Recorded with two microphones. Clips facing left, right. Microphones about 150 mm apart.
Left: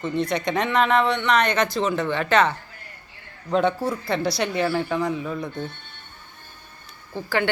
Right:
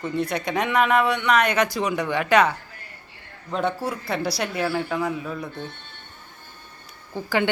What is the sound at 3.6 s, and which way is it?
Speech, 10° right (ahead or behind).